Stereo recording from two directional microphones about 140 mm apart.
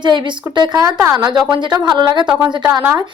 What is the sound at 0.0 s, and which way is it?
A woman's voice, 35° right (ahead or behind).